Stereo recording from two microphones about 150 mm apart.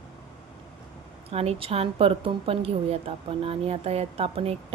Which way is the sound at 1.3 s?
40° right (ahead or behind).